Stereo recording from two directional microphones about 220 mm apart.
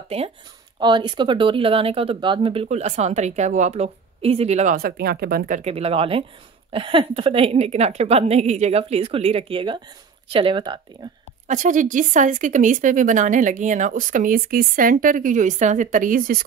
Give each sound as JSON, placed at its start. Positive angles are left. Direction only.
{"t": 0.1, "sound": "speech", "side_deg": -25}
{"t": 5.6, "sound": "speech", "side_deg": -30}
{"t": 11.4, "sound": "speech", "side_deg": -35}